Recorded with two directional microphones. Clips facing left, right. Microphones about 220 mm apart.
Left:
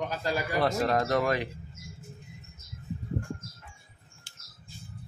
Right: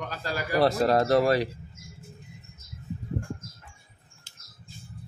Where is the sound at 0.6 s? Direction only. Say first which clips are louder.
Right 6 dB; 35° right (ahead or behind).